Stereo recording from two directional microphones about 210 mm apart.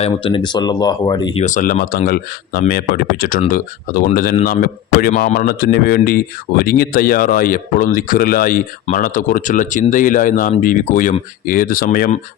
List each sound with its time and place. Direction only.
0.0 s speech: 25° left (ahead or behind)
1.5 s a man's voice: 35° left (ahead or behind)